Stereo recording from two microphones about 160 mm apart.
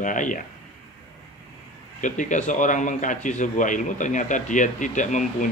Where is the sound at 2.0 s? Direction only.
50° left (ahead or behind).